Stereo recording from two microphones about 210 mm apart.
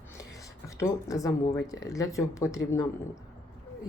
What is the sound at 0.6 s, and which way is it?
Speech, 15° left (ahead or behind).